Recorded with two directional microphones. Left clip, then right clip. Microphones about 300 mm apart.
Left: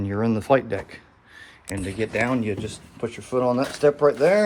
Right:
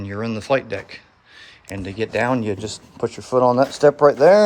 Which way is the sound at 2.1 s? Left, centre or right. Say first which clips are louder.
Right 5 dB; centre.